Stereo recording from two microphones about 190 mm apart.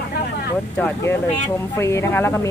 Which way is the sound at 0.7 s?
10° left (ahead or behind).